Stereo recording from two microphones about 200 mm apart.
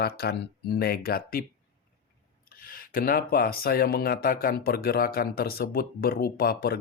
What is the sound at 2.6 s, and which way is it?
Speech, 45° left (ahead or behind).